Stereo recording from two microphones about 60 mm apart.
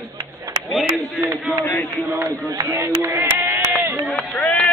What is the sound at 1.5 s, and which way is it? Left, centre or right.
Speech, left.